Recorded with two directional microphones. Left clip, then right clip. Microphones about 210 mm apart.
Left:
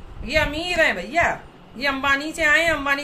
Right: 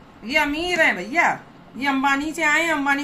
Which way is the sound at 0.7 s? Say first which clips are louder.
Even; 20° left (ahead or behind).